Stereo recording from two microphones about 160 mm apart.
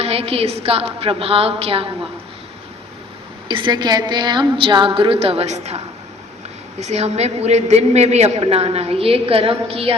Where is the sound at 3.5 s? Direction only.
30° right (ahead or behind).